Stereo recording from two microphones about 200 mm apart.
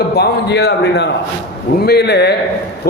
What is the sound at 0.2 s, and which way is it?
A man's voice, 55° left (ahead or behind).